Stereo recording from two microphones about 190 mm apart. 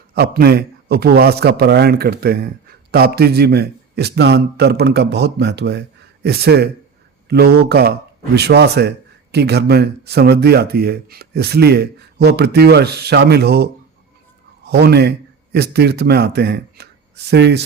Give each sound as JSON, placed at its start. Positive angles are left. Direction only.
{"t": 0.1, "sound": "speech", "side_deg": -55}